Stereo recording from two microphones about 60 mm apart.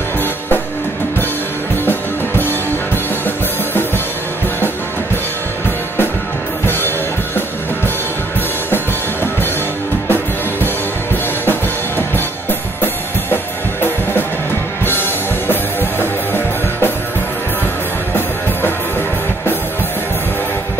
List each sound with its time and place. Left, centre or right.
3.3 s music: left
6.6 s music: left
8.6 s music: left
12.4 s music: left